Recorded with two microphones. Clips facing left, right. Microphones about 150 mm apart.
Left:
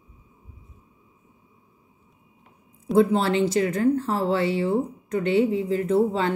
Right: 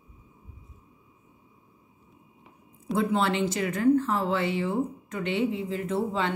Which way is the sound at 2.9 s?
35° left (ahead or behind).